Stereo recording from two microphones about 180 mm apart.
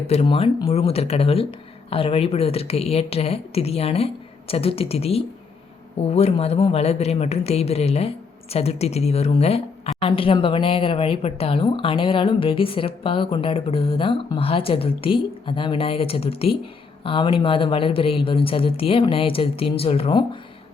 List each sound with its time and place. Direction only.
0.1 s speech: 35° left (ahead or behind)